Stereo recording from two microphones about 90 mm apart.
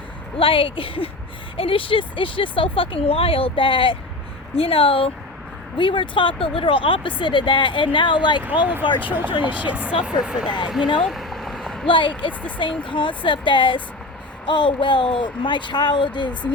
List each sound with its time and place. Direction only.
0.3 s speech: 80° left
4.5 s speech: 90° left
5.7 s speech: 70° left (ahead or behind)
8.6 s speech: 20° right (ahead or behind)
11.0 s a sound: centre (ahead or behind)
11.9 s speech: 70° left (ahead or behind)